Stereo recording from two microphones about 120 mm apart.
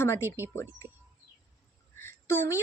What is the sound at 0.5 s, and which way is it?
Speech, 20° left (ahead or behind).